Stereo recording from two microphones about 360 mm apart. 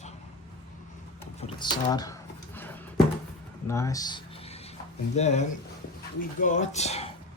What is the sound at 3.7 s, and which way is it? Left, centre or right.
Speech, centre.